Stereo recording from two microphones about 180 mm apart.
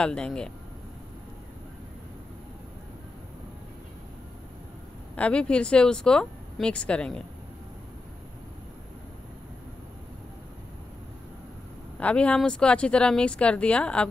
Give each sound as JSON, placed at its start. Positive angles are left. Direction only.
{"t": 0.0, "sound": "speech", "side_deg": 5}
{"t": 5.1, "sound": "speech", "side_deg": 5}
{"t": 12.0, "sound": "speech", "side_deg": 5}